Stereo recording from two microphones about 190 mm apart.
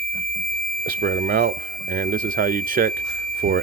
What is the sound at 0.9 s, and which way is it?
Speech, 50° right (ahead or behind).